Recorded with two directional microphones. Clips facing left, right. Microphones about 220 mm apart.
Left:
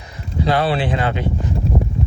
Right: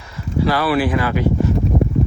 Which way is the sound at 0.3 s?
20° left (ahead or behind).